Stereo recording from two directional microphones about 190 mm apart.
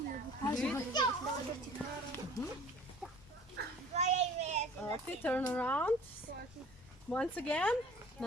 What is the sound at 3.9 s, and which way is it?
Child singing, 35° right (ahead or behind).